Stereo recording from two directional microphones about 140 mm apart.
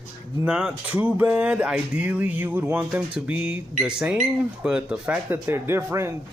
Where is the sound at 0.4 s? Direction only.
5° right (ahead or behind).